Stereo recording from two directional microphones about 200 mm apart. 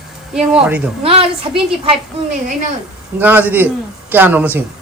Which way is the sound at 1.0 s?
25° right (ahead or behind).